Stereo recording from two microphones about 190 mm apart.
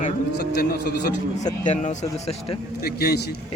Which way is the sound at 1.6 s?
40° left (ahead or behind).